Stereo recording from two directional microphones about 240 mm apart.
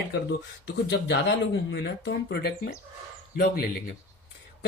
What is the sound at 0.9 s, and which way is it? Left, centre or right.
A man's voice, left.